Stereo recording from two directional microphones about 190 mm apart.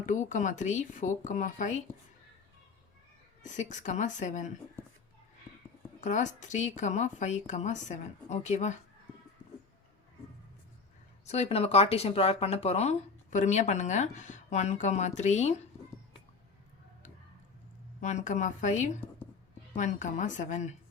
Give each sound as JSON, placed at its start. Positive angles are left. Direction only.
{"t": 0.0, "sound": "speech", "side_deg": 40}
{"t": 3.4, "sound": "speech", "side_deg": 40}
{"t": 6.0, "sound": "speech", "side_deg": 40}
{"t": 11.3, "sound": "speech", "side_deg": 35}
{"t": 18.0, "sound": "speech", "side_deg": 40}